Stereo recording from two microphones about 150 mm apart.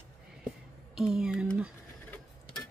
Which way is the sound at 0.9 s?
5° right (ahead or behind).